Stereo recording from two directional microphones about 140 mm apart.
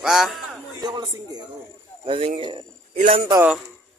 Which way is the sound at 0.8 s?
30° right (ahead or behind).